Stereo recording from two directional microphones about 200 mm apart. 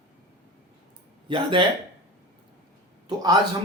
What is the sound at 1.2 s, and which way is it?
Speech, 25° right (ahead or behind).